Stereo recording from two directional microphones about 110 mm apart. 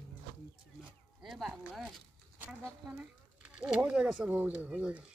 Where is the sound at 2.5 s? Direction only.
15° right (ahead or behind).